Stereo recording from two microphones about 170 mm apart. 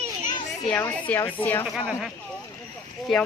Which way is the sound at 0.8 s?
10° left (ahead or behind).